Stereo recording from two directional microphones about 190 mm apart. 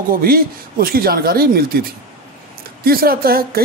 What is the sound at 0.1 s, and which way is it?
A woman's voice, 50° right (ahead or behind).